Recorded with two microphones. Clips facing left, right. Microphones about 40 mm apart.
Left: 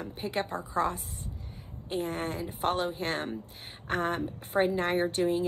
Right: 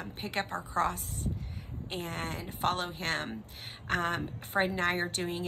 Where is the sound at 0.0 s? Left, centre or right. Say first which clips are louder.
Left 2 dB; right.